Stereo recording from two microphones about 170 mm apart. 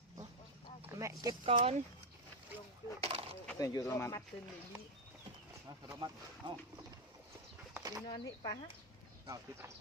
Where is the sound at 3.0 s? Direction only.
35° right (ahead or behind).